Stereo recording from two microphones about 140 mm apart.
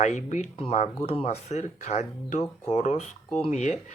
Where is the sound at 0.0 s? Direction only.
60° left (ahead or behind).